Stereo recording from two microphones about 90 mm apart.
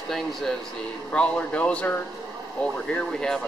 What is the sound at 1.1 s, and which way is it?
Speech, 10° left (ahead or behind).